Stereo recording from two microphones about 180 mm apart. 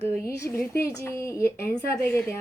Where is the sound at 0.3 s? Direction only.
15° left (ahead or behind).